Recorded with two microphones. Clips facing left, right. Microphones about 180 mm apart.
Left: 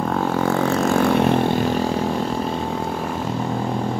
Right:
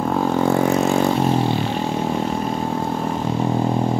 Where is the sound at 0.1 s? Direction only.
15° right (ahead or behind).